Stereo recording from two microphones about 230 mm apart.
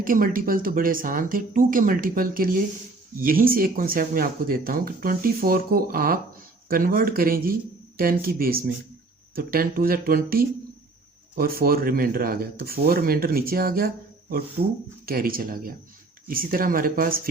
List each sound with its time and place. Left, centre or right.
0.0 s speech: right